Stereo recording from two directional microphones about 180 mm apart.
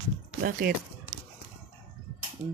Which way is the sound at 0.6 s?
55° right (ahead or behind).